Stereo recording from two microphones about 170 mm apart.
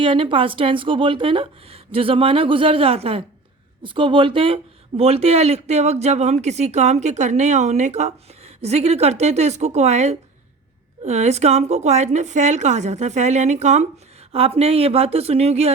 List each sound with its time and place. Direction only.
0.0 s a woman's voice: 30° right (ahead or behind)